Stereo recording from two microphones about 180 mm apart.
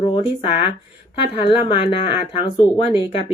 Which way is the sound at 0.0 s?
30° left (ahead or behind).